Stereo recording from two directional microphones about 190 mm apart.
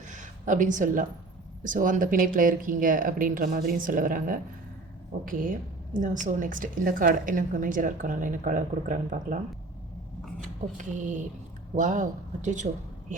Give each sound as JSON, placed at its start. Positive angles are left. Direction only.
{"t": 0.0, "sound": "a sound", "side_deg": -40}
{"t": 1.6, "sound": "a woman's voice", "side_deg": -45}
{"t": 10.8, "sound": "speech", "side_deg": -40}